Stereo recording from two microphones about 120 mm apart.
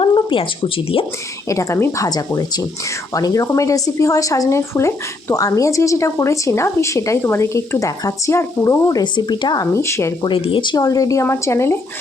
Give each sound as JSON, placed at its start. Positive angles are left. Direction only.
{"t": 0.0, "sound": "a sound", "side_deg": 45}
{"t": 0.9, "sound": "speech", "side_deg": 50}
{"t": 1.5, "sound": "speech", "side_deg": 25}
{"t": 9.7, "sound": "speech", "side_deg": 25}
{"t": 10.2, "sound": "speech", "side_deg": 45}